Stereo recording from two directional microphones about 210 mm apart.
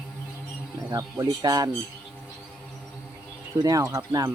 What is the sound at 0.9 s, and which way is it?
Speech, 20° right (ahead or behind).